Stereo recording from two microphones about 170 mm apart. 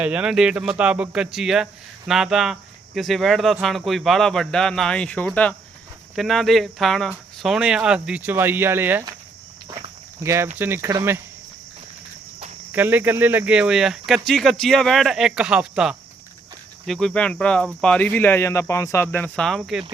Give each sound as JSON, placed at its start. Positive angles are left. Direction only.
{"t": 0.0, "sound": "speech", "side_deg": -5}
{"t": 10.2, "sound": "speech", "side_deg": -15}
{"t": 12.7, "sound": "speech", "side_deg": -10}